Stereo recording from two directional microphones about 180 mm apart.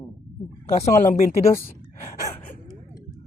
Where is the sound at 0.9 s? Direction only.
15° left (ahead or behind).